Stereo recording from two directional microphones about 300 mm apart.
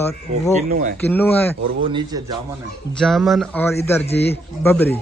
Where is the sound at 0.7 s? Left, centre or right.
Right.